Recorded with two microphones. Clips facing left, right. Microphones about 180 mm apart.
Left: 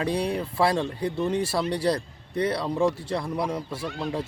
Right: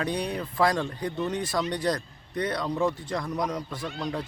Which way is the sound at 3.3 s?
10° left (ahead or behind).